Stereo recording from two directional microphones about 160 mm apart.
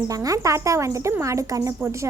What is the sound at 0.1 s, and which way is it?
Speech, 20° right (ahead or behind).